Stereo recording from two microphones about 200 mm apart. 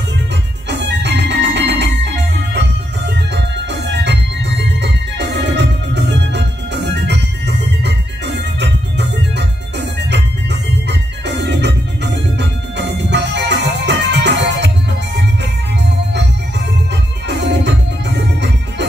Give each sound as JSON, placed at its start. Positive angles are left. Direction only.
{"t": 0.7, "sound": "organ", "side_deg": -60}
{"t": 10.1, "sound": "music", "side_deg": -60}
{"t": 17.3, "sound": "music", "side_deg": -60}